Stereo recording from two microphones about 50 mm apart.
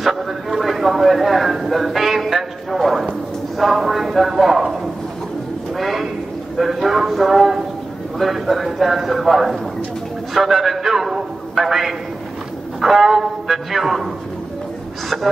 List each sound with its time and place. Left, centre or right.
0.0 s a man's voice: centre
5.8 s a sound: centre
6.6 s a man's voice: centre